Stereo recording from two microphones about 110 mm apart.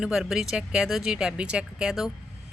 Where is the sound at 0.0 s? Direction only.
5° right (ahead or behind).